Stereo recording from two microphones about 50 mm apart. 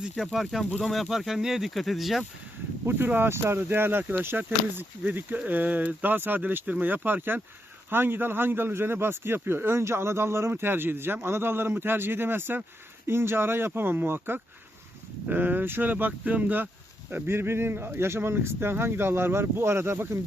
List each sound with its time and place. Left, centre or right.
0.5 s speech: centre
1.7 s speech: centre
3.2 s speech: right
10.5 s speech: right
13.1 s speech: right
17.1 s speech: right